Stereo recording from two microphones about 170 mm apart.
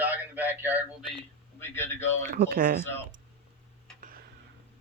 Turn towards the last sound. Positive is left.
turn(degrees=-55)  # may be behind; listen again after turning